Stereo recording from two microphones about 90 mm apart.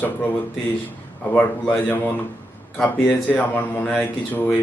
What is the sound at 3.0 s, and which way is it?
Speech, 10° left (ahead or behind).